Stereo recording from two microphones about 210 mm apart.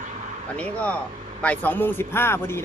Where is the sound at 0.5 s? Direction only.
5° left (ahead or behind).